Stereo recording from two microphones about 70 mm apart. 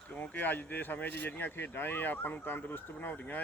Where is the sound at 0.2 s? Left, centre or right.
Left.